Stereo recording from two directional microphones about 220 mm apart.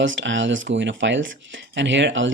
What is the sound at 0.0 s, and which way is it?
Speech, 60° right (ahead or behind).